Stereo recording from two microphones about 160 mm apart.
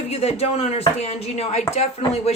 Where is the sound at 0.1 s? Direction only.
40° left (ahead or behind).